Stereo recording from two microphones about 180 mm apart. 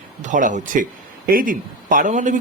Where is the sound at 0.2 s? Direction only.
45° right (ahead or behind).